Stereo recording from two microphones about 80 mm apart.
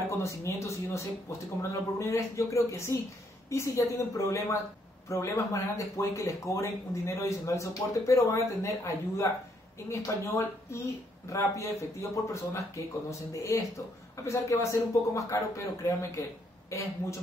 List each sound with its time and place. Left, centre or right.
0.1 s speech: left